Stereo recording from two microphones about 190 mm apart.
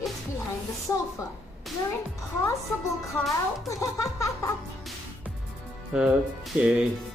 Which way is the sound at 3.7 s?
15° left (ahead or behind).